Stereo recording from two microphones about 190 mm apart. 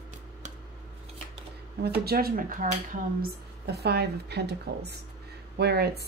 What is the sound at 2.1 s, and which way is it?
Speech, 50° right (ahead or behind).